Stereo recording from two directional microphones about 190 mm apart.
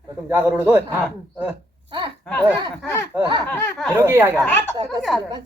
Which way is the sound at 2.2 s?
5° left (ahead or behind).